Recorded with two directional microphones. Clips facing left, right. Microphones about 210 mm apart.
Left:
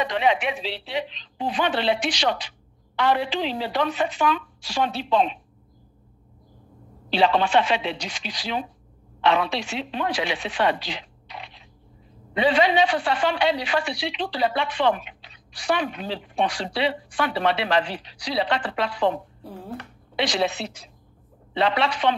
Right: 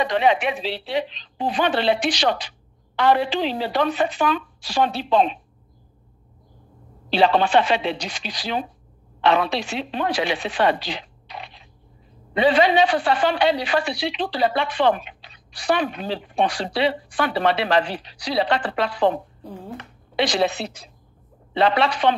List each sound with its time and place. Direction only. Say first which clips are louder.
0.0 s speech: right 3 dB; 40° right (ahead or behind)
7.1 s speech: right 2 dB; 40° right (ahead or behind)
20.2 s speech: right 3 dB; 35° right (ahead or behind)